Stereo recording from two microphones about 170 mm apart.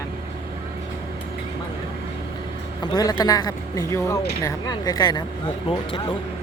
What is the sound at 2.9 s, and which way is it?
Speech, 25° left (ahead or behind).